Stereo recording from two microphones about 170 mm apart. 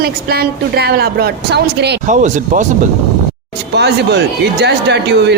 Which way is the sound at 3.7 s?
80° right.